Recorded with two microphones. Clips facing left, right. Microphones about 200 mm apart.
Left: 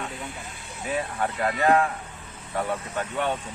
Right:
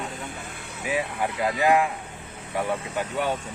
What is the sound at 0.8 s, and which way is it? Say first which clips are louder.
Speech: right 1 dB; 10° right (ahead or behind).